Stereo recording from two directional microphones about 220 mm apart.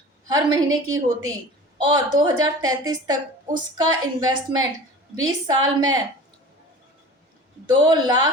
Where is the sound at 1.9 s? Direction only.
15° right (ahead or behind).